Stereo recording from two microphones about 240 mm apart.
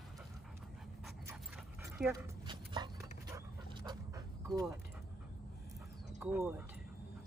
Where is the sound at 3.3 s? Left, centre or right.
Centre.